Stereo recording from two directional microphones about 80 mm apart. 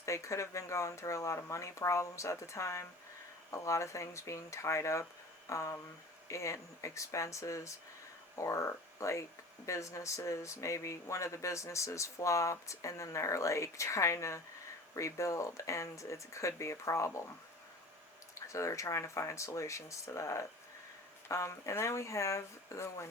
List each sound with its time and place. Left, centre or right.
0.0 s speech: left
18.3 s speech: left